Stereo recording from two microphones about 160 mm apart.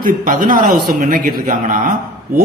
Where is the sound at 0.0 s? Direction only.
55° right (ahead or behind).